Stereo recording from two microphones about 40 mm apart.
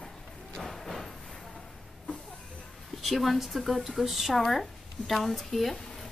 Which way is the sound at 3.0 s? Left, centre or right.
Centre.